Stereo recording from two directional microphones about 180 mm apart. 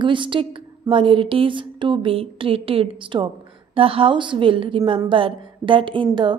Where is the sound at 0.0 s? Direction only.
25° right (ahead or behind).